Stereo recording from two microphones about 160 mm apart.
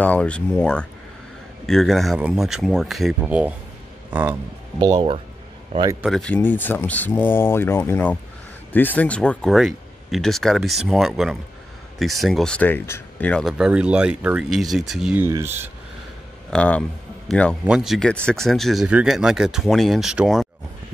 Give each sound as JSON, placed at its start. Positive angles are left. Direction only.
{"t": 0.0, "sound": "a man's voice", "side_deg": 10}
{"t": 4.7, "sound": "speech", "side_deg": -30}
{"t": 6.0, "sound": "speech", "side_deg": 5}
{"t": 15.1, "sound": "speech", "side_deg": -15}
{"t": 16.4, "sound": "speech", "side_deg": 10}